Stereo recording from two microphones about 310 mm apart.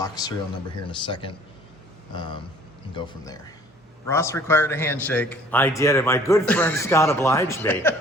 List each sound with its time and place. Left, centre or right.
0.0 s a man's voice: centre